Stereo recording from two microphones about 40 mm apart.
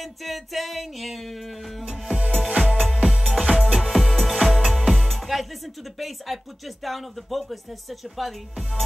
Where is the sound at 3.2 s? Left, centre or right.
Centre.